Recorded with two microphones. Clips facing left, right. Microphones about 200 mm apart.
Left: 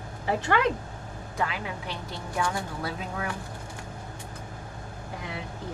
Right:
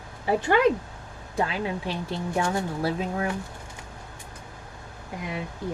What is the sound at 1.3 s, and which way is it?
Speech, 30° right (ahead or behind).